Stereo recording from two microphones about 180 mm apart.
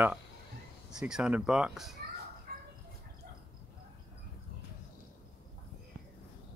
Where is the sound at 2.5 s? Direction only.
55° right (ahead or behind).